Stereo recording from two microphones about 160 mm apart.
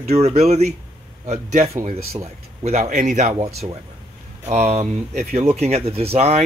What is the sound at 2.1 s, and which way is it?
Speech, 45° right (ahead or behind).